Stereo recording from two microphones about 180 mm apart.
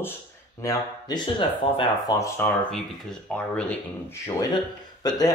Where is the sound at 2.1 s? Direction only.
15° left (ahead or behind).